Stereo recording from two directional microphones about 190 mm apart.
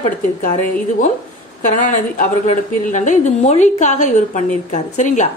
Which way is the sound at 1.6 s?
45° left (ahead or behind).